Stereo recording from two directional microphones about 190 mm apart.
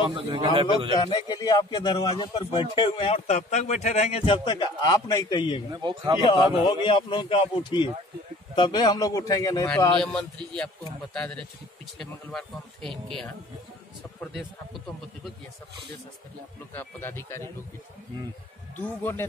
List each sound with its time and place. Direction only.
0.1 s a man's voice: 25° right (ahead or behind)
0.9 s speech: 20° left (ahead or behind)
5.7 s a man's voice: 20° right (ahead or behind)
6.2 s speech: 25° left (ahead or behind)
9.9 s speech: 5° left (ahead or behind)
14.2 s a man's voice: centre (ahead or behind)
16.7 s speech: 10° left (ahead or behind)
18.8 s speech: 10° left (ahead or behind)